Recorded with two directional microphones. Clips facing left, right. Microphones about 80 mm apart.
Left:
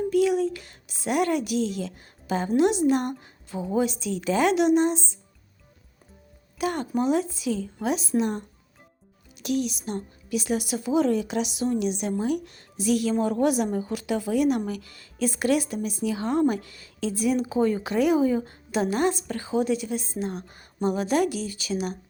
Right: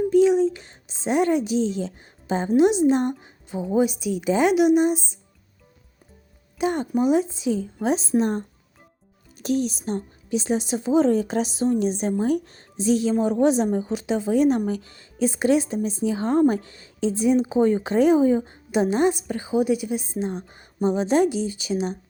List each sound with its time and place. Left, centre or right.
0.1 s a woman's voice: right
6.6 s a woman's voice: right